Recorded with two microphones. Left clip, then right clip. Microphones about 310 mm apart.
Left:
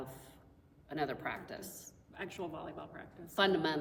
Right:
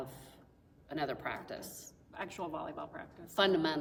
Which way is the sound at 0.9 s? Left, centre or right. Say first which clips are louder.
Even; centre.